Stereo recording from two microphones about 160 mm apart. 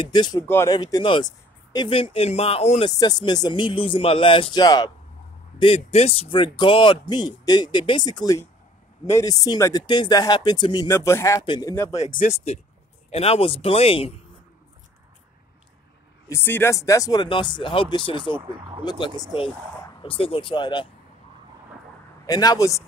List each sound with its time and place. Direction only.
0.0 s speech: 25° left (ahead or behind)
3.0 s speech: 25° left (ahead or behind)
5.6 s speech: 40° left (ahead or behind)
11.7 s speech: 15° left (ahead or behind)
13.1 s speech: 40° left (ahead or behind)
16.3 s speech: 15° left (ahead or behind); by 18.4 s 30° left (ahead or behind)
18.4 s speech: 30° right (ahead or behind)
18.9 s speech: 30° left (ahead or behind)
22.2 s speech: 25° left (ahead or behind)